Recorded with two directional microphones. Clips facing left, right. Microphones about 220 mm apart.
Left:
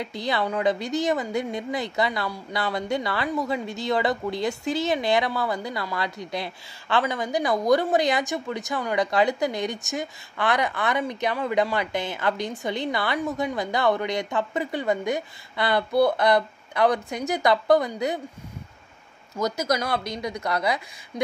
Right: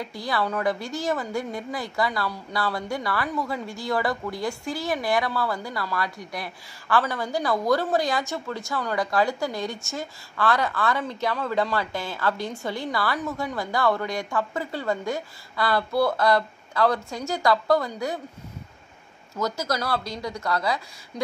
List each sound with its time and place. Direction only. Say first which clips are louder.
0.0 s a woman's voice: left 1 dB; 20° left (ahead or behind)
19.3 s a woman's voice: left 2 dB; 20° left (ahead or behind)